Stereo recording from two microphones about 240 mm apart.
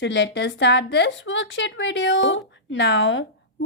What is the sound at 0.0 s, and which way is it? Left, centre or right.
A woman's voice, left.